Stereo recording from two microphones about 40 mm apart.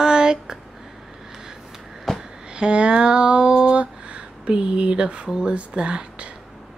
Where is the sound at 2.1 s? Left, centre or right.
Centre.